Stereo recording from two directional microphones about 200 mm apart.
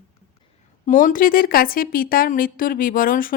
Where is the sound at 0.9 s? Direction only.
40° left (ahead or behind).